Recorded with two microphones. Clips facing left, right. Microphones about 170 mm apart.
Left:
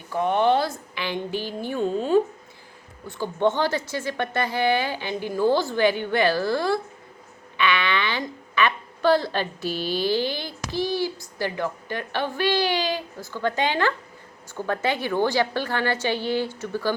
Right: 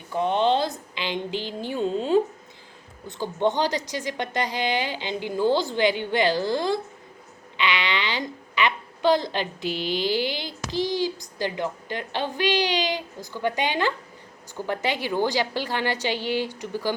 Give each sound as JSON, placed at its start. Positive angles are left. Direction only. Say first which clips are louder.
{"t": 0.1, "sound": "a woman's voice", "louder": "left 1 dB", "side_deg": -20}